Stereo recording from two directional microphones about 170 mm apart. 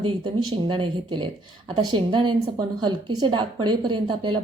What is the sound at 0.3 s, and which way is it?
A woman's voice, 25° right (ahead or behind).